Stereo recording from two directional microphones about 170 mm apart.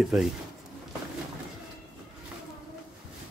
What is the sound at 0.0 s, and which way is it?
Speech, centre (ahead or behind).